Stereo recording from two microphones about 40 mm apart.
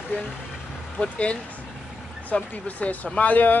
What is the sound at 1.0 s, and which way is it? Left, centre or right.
Speech, left.